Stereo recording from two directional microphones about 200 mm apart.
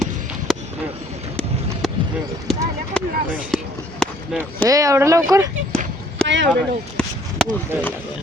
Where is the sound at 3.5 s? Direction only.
Centre (ahead or behind).